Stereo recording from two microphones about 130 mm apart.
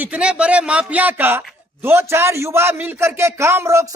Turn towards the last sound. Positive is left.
turn(degrees=-20)  # may be behind; listen again after turning